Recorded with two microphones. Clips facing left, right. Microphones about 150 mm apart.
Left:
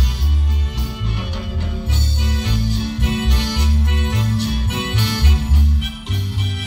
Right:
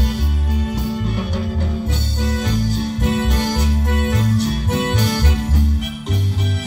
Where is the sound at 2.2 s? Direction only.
45° right (ahead or behind).